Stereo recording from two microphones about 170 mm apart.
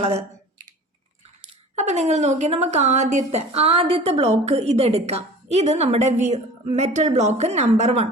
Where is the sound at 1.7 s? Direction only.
45° right (ahead or behind).